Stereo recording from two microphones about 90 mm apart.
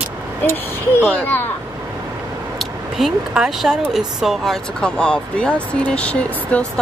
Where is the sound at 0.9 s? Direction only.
20° left (ahead or behind).